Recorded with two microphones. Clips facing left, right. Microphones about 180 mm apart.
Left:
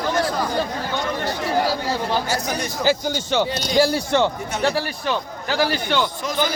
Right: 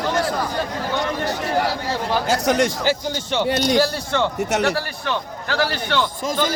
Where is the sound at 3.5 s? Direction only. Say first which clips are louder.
Right 7 dB; 60° right (ahead or behind).